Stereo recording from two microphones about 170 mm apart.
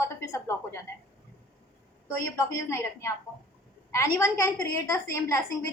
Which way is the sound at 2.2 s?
15° left (ahead or behind).